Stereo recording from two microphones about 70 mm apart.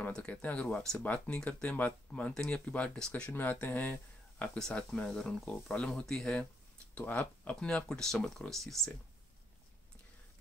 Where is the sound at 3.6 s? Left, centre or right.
Left.